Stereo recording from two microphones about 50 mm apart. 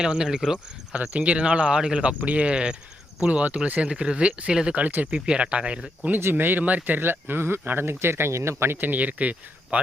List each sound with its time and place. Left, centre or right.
0.0 s speech: centre
1.2 s speech: right
4.8 s speech: right
5.1 s speech: centre
6.3 s speech: right
7.9 s speech: right
8.8 s speech: right